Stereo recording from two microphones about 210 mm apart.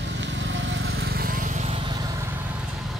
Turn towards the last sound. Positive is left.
turn(degrees=-20)  # may be behind; listen again after turning